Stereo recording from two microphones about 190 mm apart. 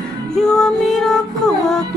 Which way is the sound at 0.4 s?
Centre (ahead or behind).